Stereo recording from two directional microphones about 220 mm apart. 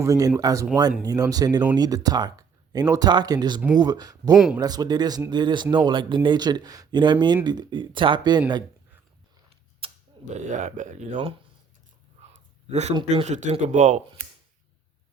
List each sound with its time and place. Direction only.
0.0 s speech: 15° right (ahead or behind)
4.4 s speech: 5° right (ahead or behind)
4.6 s speech: 15° right (ahead or behind)
9.8 s a man's voice: 35° right (ahead or behind)